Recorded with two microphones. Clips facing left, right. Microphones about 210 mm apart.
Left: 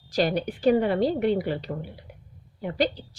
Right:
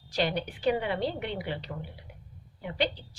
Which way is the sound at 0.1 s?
40° left (ahead or behind).